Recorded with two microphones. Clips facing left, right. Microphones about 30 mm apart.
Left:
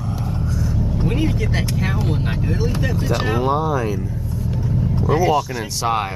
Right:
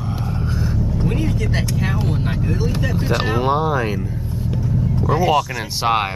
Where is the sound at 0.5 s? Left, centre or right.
Right.